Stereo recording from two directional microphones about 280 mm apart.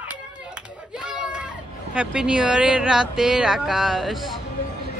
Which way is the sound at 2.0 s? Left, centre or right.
Centre.